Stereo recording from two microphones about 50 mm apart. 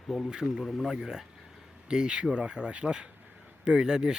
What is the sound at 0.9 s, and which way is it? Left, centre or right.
Speech, centre.